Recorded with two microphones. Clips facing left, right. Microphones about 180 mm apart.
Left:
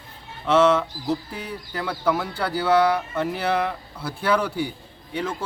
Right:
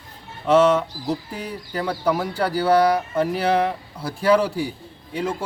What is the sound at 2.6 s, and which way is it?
Speech, 40° right (ahead or behind).